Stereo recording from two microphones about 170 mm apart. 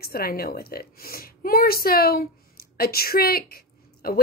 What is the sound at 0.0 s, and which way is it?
A woman's voice, 65° left (ahead or behind).